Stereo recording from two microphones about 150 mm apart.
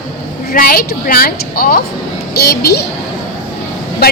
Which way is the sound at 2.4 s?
90° left.